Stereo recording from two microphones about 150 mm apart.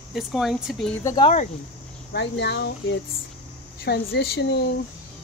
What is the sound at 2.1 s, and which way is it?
Speech, 90° left.